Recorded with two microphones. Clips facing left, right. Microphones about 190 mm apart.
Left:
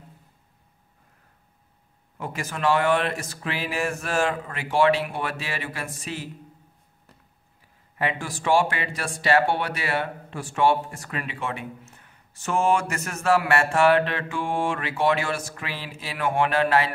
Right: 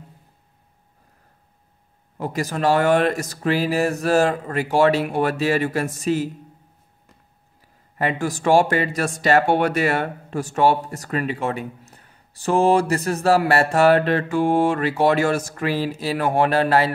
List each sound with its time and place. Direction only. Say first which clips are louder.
2.1 s speech: right 7 dB; 35° right (ahead or behind)
8.0 s speech: right 6 dB; 40° right (ahead or behind)